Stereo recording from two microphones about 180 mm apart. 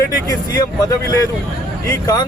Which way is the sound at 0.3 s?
20° left (ahead or behind).